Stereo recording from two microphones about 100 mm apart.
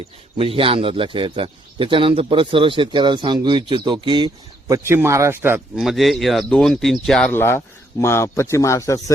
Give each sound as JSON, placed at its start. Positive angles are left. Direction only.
{"t": 0.3, "sound": "speech", "side_deg": -65}
{"t": 4.7, "sound": "speech", "side_deg": -25}
{"t": 5.7, "sound": "speech", "side_deg": 0}
{"t": 7.3, "sound": "speech", "side_deg": 25}